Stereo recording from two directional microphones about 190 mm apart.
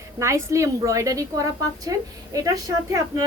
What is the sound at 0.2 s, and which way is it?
A woman's voice, 15° right (ahead or behind).